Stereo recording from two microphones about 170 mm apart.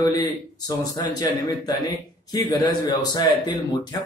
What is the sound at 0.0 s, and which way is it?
A man's voice, 20° left (ahead or behind).